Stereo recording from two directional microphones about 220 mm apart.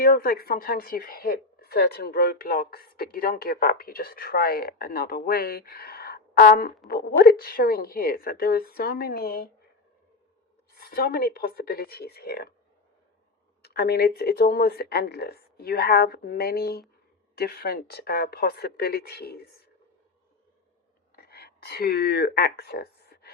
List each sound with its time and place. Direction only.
0.0 s a woman's voice: 40° left (ahead or behind)
10.8 s a woman's voice: 45° left (ahead or behind)
13.7 s a woman's voice: 45° left (ahead or behind)
21.2 s speech: 45° left (ahead or behind)